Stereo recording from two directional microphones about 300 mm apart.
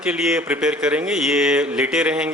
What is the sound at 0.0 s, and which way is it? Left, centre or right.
Speech, centre.